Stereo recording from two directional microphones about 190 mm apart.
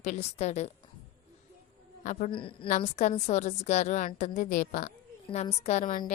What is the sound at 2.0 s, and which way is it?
Speech, 40° left (ahead or behind).